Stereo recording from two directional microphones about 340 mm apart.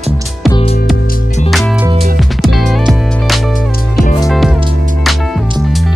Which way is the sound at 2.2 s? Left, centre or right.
Centre.